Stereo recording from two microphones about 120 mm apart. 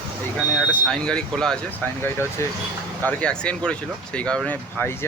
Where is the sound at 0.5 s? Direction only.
5° left (ahead or behind).